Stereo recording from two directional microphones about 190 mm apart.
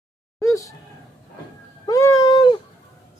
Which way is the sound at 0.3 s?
15° left (ahead or behind).